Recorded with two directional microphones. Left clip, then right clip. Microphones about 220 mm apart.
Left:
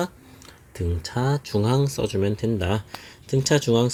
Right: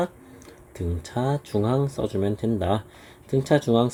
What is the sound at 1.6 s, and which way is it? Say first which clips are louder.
Speech: left 1 dB; 40° left (ahead or behind).